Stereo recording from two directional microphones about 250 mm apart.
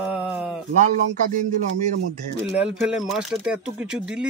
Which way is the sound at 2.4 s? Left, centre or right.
Centre.